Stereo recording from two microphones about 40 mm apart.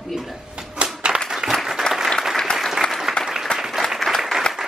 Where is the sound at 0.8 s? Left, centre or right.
Right.